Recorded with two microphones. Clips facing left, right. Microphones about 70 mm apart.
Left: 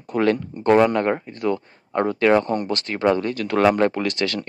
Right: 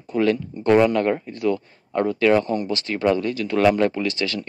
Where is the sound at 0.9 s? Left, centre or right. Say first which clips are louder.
Even; left.